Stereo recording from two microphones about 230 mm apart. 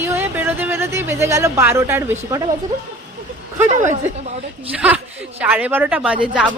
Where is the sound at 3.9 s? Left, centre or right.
Right.